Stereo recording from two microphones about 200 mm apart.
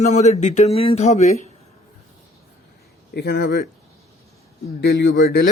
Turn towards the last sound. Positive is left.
turn(degrees=60)  # may be behind; listen again after turning